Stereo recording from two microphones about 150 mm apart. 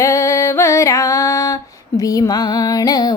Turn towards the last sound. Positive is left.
turn(degrees=25)  # may be behind; listen again after turning